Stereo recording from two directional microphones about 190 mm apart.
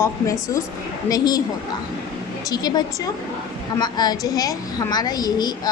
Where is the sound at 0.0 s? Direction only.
15° left (ahead or behind).